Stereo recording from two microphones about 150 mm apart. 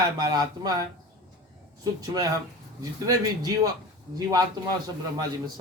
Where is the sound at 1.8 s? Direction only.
25° right (ahead or behind).